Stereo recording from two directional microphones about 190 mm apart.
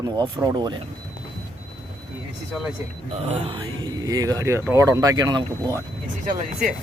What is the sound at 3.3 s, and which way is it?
Speech, 25° right (ahead or behind).